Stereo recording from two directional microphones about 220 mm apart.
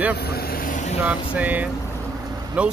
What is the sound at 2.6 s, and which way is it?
Speech, 5° right (ahead or behind).